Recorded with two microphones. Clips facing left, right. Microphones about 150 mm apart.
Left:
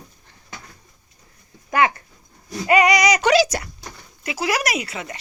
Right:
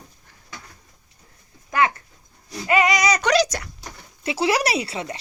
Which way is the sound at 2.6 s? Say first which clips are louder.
Left 3 dB; 15° left (ahead or behind).